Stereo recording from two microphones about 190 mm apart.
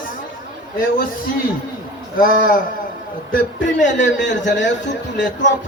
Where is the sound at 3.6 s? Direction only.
70° left (ahead or behind).